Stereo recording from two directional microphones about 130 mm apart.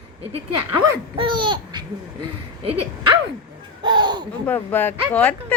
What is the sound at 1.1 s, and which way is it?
Laughter, 40° right (ahead or behind).